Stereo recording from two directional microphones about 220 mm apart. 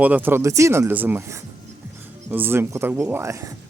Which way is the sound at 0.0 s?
10° right (ahead or behind).